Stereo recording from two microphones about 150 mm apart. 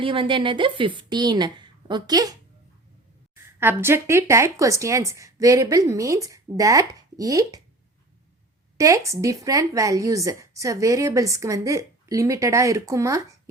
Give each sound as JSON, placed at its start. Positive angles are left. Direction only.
{"t": 0.0, "sound": "a woman's voice", "side_deg": -35}
{"t": 3.6, "sound": "a woman's voice", "side_deg": -15}
{"t": 8.8, "sound": "a woman's voice", "side_deg": -20}